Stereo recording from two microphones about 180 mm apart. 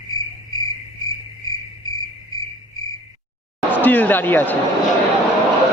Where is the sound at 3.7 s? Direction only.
10° left (ahead or behind).